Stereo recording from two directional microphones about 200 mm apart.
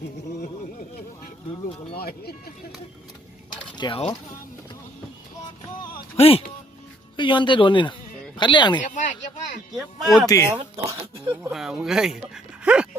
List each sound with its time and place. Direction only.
2.0 s speech: 50° left (ahead or behind)
3.8 s speech: 25° left (ahead or behind)
6.1 s speech: 30° left (ahead or behind)
8.8 s speech: 40° left (ahead or behind)
9.7 s speech: centre (ahead or behind)
10.2 s speech: 15° left (ahead or behind)
11.3 s speech: 5° right (ahead or behind)